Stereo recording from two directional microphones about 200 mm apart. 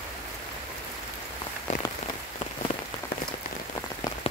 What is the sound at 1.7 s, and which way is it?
Rain on surface, 40° left (ahead or behind).